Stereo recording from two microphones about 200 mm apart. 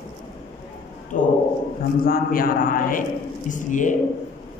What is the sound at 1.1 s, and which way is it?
A man's voice, 40° left (ahead or behind).